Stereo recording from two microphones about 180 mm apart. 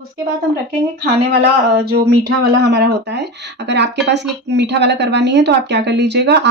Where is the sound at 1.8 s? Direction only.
65° right (ahead or behind).